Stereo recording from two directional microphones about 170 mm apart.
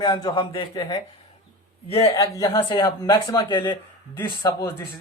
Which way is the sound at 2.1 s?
20° left (ahead or behind).